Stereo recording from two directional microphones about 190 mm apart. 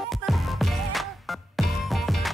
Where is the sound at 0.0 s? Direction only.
Centre (ahead or behind).